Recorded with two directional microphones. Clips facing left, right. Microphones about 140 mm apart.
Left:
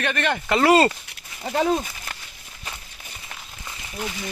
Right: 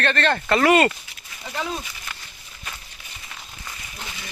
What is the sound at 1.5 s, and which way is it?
Speech, 45° left (ahead or behind).